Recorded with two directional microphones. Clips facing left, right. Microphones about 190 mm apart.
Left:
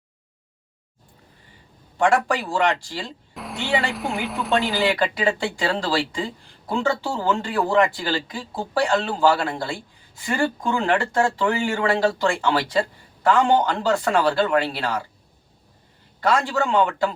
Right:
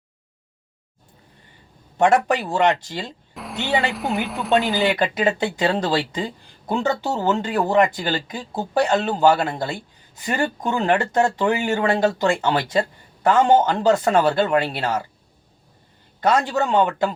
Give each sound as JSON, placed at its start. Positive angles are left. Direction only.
{"t": 2.0, "sound": "speech", "side_deg": -20}
{"t": 3.3, "sound": "a sound", "side_deg": 0}
{"t": 3.9, "sound": "speech", "side_deg": 0}
{"t": 4.8, "sound": "speech", "side_deg": -20}
{"t": 16.2, "sound": "speech", "side_deg": -20}